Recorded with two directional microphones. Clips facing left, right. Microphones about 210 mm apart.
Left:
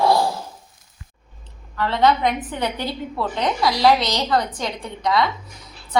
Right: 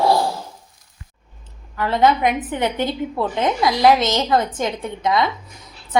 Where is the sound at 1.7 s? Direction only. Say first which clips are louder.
Right 1 dB; 15° right (ahead or behind).